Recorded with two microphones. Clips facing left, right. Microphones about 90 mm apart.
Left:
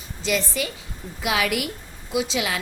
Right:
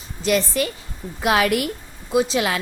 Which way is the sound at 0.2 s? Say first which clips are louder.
Right 5 dB; 55° right (ahead or behind).